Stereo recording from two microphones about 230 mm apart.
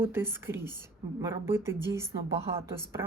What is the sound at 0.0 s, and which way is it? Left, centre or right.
A woman's voice, centre.